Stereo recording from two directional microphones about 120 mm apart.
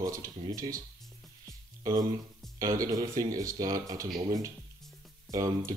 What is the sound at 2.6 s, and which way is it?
Speech, 30° right (ahead or behind).